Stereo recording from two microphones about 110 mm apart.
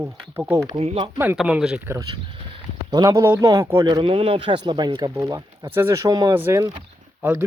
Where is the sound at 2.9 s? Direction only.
35° right (ahead or behind).